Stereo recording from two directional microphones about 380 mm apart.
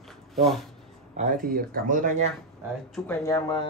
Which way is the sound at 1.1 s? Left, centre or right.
Right.